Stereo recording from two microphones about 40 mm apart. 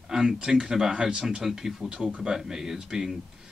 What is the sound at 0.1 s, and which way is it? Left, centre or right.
Speech, centre.